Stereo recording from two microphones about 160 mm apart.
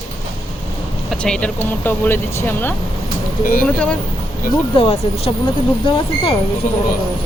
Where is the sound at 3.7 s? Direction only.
5° left (ahead or behind).